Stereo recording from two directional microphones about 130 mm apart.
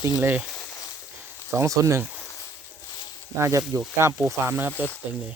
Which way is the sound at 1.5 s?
25° right (ahead or behind).